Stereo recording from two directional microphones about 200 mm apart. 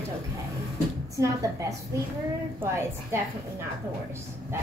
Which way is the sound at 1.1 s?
15° right (ahead or behind).